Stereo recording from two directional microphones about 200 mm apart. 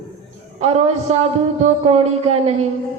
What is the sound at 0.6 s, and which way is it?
A man's voice, 30° right (ahead or behind).